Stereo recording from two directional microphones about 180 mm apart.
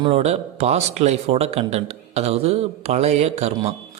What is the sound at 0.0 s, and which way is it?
A man's voice, 35° right (ahead or behind).